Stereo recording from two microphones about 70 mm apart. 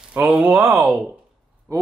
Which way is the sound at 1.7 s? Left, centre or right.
Right.